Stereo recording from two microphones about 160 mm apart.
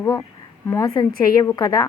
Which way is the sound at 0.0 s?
20° left (ahead or behind).